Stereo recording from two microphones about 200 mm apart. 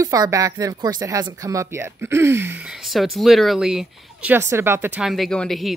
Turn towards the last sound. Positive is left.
turn(degrees=0)  # may be behind; listen again after turning